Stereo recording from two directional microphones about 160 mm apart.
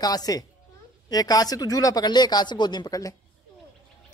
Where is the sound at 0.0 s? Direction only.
25° left (ahead or behind).